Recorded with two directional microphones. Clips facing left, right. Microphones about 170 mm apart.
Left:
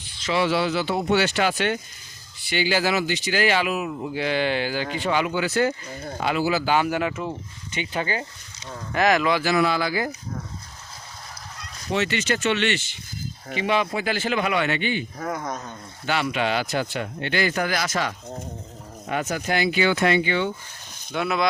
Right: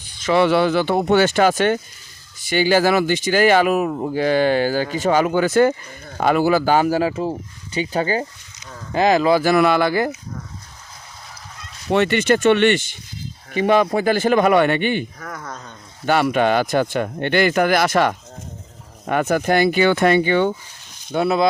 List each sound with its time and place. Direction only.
0.0 s speech: 50° right (ahead or behind); by 9.4 s 30° right (ahead or behind)
9.4 s speech: 60° right (ahead or behind)
11.9 s speech: 60° right (ahead or behind)
15.2 s speech: 20° left (ahead or behind)
16.0 s speech: 50° right (ahead or behind)
21.1 s speech: 35° right (ahead or behind)